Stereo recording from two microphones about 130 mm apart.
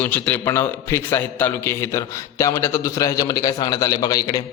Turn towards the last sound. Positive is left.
turn(degrees=30)  # may be behind; listen again after turning